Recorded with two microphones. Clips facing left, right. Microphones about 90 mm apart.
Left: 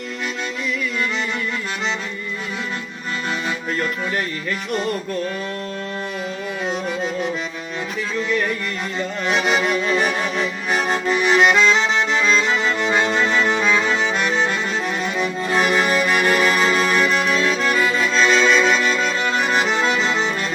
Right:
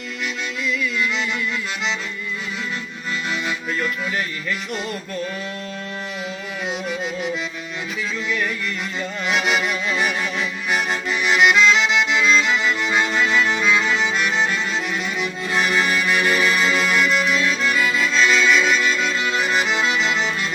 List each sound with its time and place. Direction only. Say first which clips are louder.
6.7 s music: left 2 dB; 30° left (ahead or behind)
9.2 s music: left 2 dB; 30° left (ahead or behind)
12.2 s accordion: even; 35° left (ahead or behind)
12.8 s music: left 2 dB; 25° left (ahead or behind)
14.1 s music: left 1 dB; 40° left (ahead or behind)
17.6 s accordion: left 2 dB; 35° left (ahead or behind)